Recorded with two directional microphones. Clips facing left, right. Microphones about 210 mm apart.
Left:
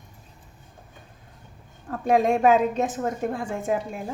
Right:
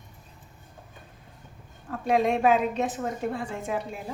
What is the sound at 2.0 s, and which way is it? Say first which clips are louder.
A woman's voice: left 3 dB; 45° left (ahead or behind).